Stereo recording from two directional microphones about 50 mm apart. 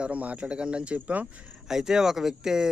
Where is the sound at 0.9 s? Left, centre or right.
Right.